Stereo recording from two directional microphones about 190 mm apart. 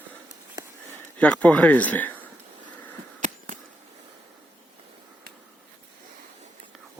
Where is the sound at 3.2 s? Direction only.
40° right (ahead or behind).